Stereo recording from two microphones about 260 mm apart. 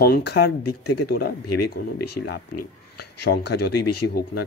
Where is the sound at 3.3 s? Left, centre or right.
Left.